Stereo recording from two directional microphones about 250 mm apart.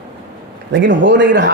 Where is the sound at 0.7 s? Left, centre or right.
Right.